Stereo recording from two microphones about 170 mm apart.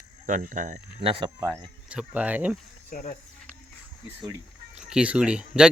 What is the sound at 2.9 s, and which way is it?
Speech, 40° left (ahead or behind).